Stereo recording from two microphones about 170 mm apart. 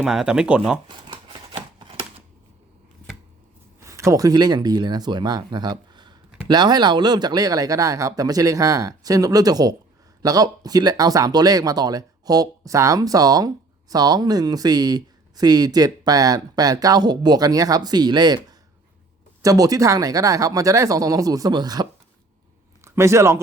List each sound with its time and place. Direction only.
0.0 s speech: 5° right (ahead or behind)
0.9 s scissors: 30° right (ahead or behind)
3.8 s speech: 15° right (ahead or behind)
19.4 s a man's voice: 20° right (ahead or behind)